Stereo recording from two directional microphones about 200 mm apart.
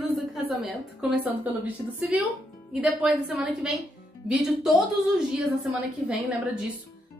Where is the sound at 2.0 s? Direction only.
10° right (ahead or behind).